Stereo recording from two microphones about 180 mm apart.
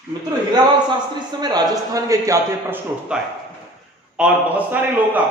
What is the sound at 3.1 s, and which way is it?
A man's voice, 5° right (ahead or behind).